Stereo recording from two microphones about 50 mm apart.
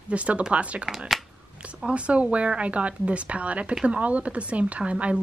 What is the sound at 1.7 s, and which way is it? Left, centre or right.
Speech, centre.